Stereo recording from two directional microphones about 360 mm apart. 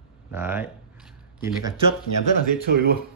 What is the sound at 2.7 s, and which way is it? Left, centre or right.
Speech, right.